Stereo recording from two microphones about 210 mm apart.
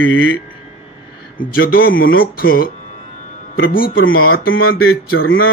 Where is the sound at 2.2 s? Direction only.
45° left (ahead or behind).